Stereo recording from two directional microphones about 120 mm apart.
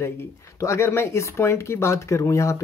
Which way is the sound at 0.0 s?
20° left (ahead or behind).